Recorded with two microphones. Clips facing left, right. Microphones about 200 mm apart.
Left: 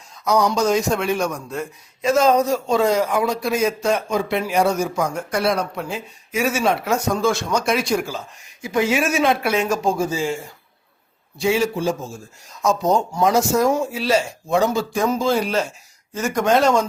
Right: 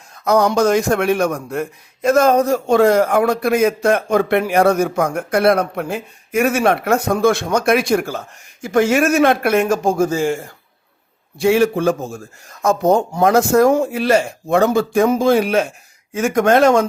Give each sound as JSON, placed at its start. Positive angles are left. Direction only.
{"t": 0.3, "sound": "a man's voice", "side_deg": -55}